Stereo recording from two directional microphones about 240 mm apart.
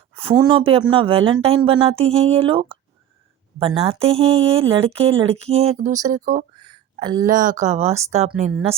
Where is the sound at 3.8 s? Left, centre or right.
Right.